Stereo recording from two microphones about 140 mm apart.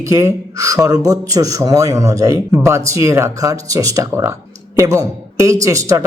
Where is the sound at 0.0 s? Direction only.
20° right (ahead or behind).